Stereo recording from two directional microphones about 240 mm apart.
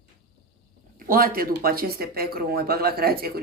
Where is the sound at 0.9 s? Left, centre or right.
Right.